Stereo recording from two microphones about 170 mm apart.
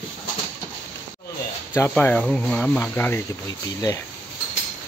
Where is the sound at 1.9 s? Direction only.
5° left (ahead or behind).